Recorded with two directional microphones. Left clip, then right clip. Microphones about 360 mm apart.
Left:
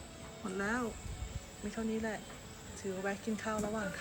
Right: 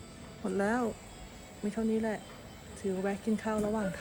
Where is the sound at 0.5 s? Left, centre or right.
Centre.